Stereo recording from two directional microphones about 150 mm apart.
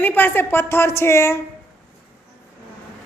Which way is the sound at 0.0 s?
15° left (ahead or behind).